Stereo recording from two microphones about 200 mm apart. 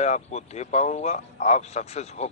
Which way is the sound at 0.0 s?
35° left (ahead or behind).